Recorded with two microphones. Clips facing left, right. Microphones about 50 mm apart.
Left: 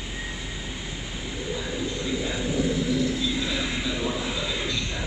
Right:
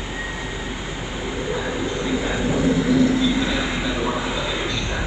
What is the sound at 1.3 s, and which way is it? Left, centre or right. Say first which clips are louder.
Vehicle: right 6 dB; right.